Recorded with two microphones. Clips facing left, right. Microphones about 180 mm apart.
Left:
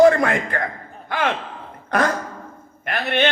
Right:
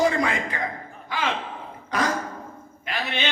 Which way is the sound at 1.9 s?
55° left (ahead or behind).